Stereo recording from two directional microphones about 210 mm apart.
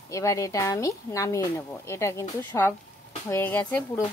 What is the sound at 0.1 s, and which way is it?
Speech, 15° left (ahead or behind).